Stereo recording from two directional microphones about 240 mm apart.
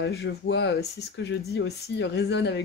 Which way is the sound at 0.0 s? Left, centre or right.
Left.